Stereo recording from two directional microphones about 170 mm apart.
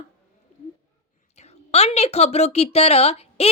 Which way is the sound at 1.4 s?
40° left (ahead or behind).